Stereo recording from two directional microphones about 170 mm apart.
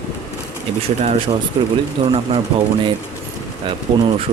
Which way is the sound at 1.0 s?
35° right (ahead or behind).